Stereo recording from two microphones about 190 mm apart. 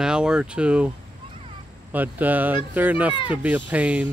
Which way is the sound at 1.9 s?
10° right (ahead or behind).